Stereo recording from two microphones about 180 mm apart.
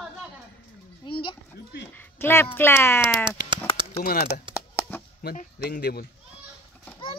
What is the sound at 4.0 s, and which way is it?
Speech, 55° left (ahead or behind).